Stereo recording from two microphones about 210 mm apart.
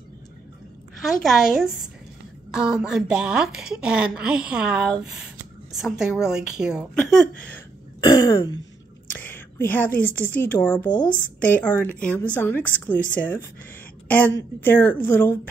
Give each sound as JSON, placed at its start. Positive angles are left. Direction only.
{"t": 1.2, "sound": "a woman's voice", "side_deg": 0}
{"t": 7.4, "sound": "cough", "side_deg": 10}
{"t": 8.2, "sound": "a woman's voice", "side_deg": 20}
{"t": 9.1, "sound": "whispering", "side_deg": 10}
{"t": 10.3, "sound": "a woman's voice", "side_deg": 10}